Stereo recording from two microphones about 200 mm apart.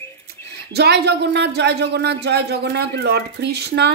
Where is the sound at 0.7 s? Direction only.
55° right (ahead or behind).